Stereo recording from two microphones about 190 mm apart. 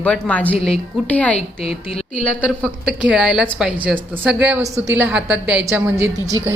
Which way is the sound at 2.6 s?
5° right (ahead or behind).